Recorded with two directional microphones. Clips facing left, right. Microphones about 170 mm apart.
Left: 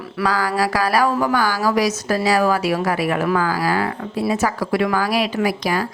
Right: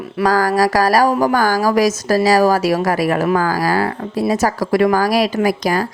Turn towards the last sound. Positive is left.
turn(degrees=-40)  # may be behind; listen again after turning